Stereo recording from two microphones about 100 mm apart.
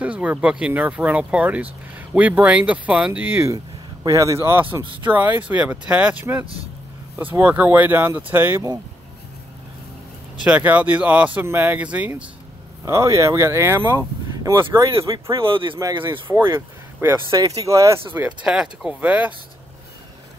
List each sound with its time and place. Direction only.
0.0 s speech: 15° right (ahead or behind)
3.4 s speech: 35° right (ahead or behind); by 8.6 s 20° right (ahead or behind)
10.4 s speech: 15° right (ahead or behind)
12.8 s speech: 30° right (ahead or behind)
15.3 s speech: 60° right (ahead or behind)
17.0 s speech: 30° right (ahead or behind)
18.1 s speech: 20° right (ahead or behind)
18.5 s speech: 5° right (ahead or behind)